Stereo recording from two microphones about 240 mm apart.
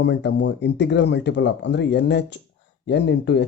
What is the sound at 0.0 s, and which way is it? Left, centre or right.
Speech, left.